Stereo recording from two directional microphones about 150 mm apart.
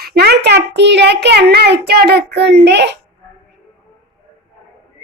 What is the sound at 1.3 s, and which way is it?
A child's voice, 90° right.